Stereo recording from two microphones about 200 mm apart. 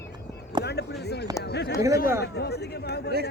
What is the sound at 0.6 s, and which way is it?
Speech, 55° left (ahead or behind).